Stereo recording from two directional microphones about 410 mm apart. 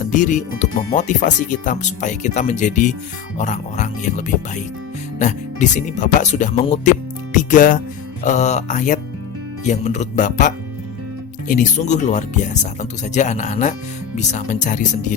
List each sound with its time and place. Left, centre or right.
0.0 s speech: centre
5.2 s speech: centre